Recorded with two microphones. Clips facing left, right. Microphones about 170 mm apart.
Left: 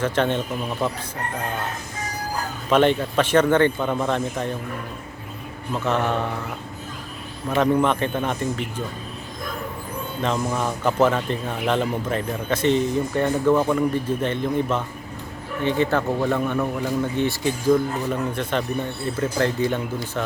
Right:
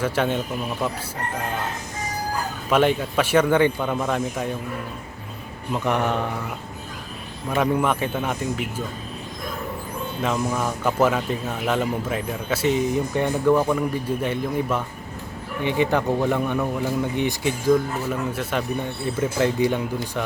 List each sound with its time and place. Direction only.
0.0 s speech: 10° right (ahead or behind)
2.6 s speech: 10° right (ahead or behind)
5.7 s speech: 15° right (ahead or behind)
7.5 s speech: 10° right (ahead or behind)
10.2 s speech: 5° right (ahead or behind)